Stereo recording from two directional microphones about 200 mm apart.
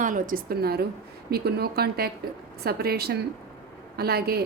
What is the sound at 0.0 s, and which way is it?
Speech, 40° right (ahead or behind).